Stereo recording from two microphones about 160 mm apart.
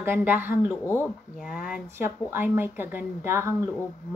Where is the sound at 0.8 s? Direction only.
15° left (ahead or behind).